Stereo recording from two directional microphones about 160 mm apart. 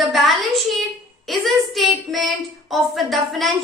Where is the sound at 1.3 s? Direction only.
Centre (ahead or behind).